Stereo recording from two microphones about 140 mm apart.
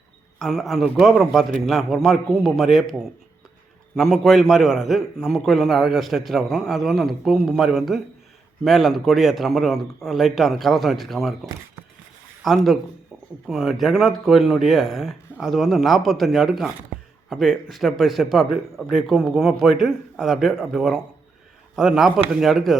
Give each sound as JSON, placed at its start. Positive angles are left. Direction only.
{"t": 0.3, "sound": "a man's voice", "side_deg": 0}
{"t": 3.9, "sound": "a man's voice", "side_deg": 0}
{"t": 12.4, "sound": "a man's voice", "side_deg": 0}